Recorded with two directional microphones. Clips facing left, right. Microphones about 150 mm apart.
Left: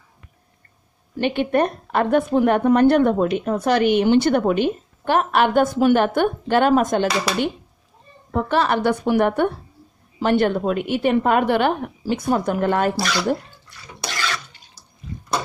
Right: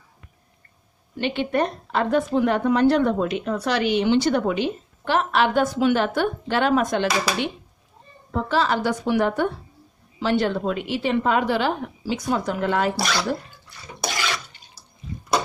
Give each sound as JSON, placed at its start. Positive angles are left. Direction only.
{"t": 1.1, "sound": "a woman's voice", "side_deg": 50}
{"t": 8.3, "sound": "a woman's voice", "side_deg": 55}
{"t": 14.0, "sound": "water", "side_deg": -15}